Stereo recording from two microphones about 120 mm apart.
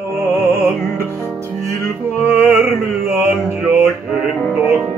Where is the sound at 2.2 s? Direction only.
20° right (ahead or behind).